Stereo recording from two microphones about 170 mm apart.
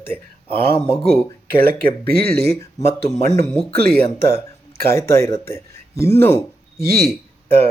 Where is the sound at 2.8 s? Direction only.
15° left (ahead or behind).